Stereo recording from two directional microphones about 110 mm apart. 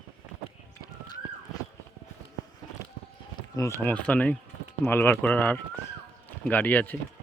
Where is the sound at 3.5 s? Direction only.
30° left (ahead or behind).